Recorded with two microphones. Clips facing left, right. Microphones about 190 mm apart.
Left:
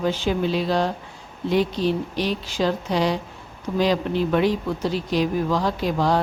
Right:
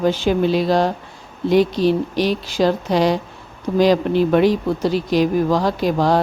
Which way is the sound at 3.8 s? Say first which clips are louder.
Right 6 dB; 80° right.